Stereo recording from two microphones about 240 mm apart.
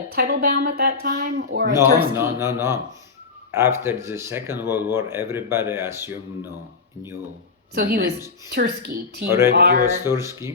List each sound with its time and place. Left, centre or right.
0.1 s speech: right
2.1 s speech: centre
7.8 s speech: right
9.2 s speech: centre
9.6 s speech: right
9.8 s speech: centre